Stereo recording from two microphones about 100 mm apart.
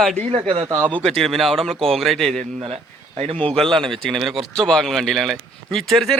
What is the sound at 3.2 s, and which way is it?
Speech, 70° right (ahead or behind).